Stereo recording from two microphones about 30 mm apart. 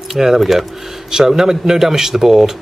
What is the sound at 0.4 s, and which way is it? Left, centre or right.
Speech, centre.